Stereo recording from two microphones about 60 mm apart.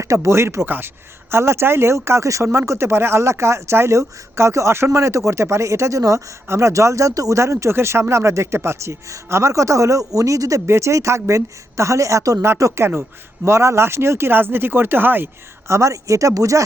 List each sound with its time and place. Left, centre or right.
0.0 s speech: right
2.4 s speech: right
7.3 s speech: right
10.1 s speech: right
10.7 s a woman's voice: right
12.4 s speech: right
12.9 s speech: right
13.5 s speech: right
15.6 s a woman's voice: right